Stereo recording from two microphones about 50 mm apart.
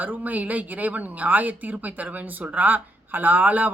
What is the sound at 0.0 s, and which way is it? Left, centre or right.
A woman's voice, right.